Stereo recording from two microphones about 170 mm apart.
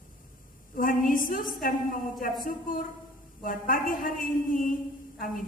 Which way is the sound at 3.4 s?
55° left (ahead or behind).